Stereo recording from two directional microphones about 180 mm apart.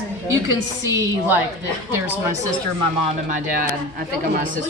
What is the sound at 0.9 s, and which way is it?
Speech, 15° right (ahead or behind).